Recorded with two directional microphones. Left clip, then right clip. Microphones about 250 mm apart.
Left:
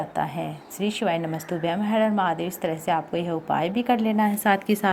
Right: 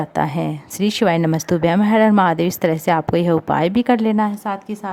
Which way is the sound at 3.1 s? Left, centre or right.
Right.